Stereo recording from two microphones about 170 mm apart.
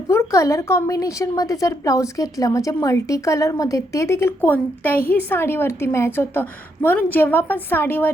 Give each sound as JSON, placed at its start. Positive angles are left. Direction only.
{"t": 0.1, "sound": "a woman's voice", "side_deg": 15}